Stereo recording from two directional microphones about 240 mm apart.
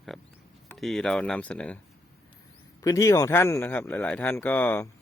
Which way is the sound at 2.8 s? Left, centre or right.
Centre.